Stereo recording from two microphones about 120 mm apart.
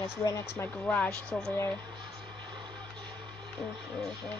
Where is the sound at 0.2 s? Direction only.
25° left (ahead or behind).